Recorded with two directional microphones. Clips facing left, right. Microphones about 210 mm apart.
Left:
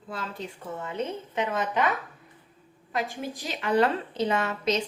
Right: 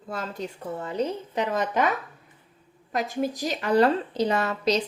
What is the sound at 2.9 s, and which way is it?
A woman's voice, 40° right (ahead or behind).